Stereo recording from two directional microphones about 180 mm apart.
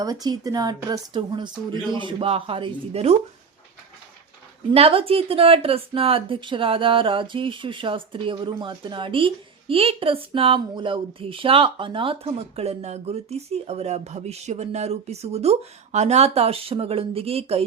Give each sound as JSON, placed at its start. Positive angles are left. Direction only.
{"t": 0.0, "sound": "speech", "side_deg": -20}
{"t": 4.7, "sound": "a woman's voice", "side_deg": -35}